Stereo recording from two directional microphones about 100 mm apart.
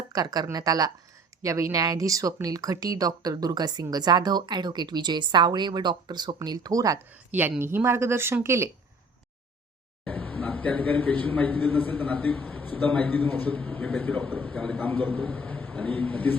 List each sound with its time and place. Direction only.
0.1 s speech: 40° right (ahead or behind)
7.3 s a woman's voice: 20° right (ahead or behind)
10.0 s a man's voice: 10° left (ahead or behind)
13.6 s a man's voice: 5° left (ahead or behind)